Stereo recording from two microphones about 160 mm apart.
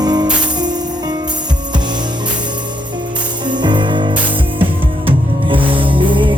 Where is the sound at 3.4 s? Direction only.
30° right (ahead or behind).